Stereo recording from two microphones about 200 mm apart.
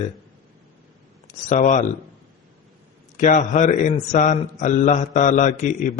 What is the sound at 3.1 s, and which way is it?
A man's voice, 40° left (ahead or behind).